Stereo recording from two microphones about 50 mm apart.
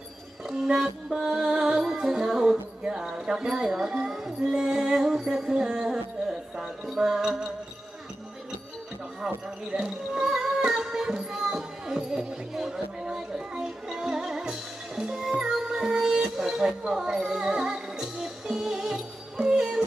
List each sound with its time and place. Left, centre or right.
0.4 s music: centre
9.2 s speech: centre
14.9 s music: centre